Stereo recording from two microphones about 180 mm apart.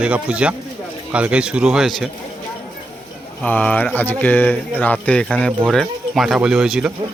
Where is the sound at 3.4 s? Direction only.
10° left (ahead or behind).